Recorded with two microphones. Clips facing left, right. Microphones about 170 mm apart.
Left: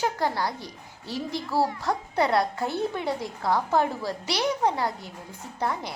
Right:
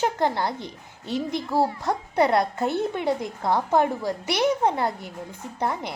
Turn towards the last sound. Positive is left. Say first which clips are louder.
# right 2 dB
turn(degrees=-20)  # may be behind; listen again after turning